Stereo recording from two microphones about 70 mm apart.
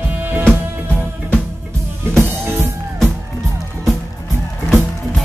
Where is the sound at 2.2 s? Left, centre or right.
Right.